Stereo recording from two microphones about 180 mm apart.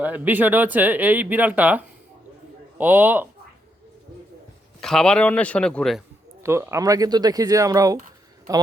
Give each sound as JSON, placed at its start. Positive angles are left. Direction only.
{"t": 0.0, "sound": "speech", "side_deg": -10}
{"t": 4.8, "sound": "a man's voice", "side_deg": 5}
{"t": 6.4, "sound": "speech", "side_deg": -15}